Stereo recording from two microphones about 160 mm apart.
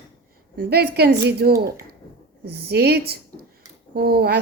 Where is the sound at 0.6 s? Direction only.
80° right.